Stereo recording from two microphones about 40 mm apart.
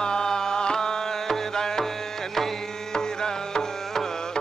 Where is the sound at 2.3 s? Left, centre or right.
Centre.